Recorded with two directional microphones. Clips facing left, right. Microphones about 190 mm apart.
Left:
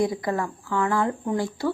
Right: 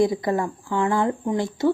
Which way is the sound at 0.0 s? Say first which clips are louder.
Right 4 dB; 25° right (ahead or behind).